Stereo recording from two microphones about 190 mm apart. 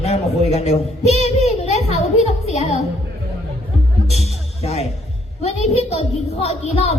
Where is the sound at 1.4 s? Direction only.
35° left (ahead or behind).